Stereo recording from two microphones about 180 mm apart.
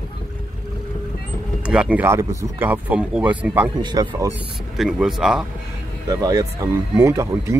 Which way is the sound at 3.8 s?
25° right (ahead or behind).